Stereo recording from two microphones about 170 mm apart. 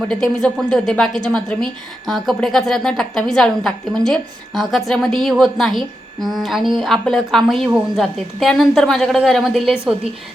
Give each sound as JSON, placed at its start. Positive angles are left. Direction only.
{"t": 0.4, "sound": "a woman's voice", "side_deg": 5}